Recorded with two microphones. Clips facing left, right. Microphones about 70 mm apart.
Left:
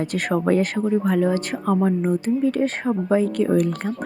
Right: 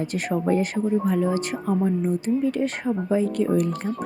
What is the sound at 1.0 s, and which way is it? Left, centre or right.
Speech, left.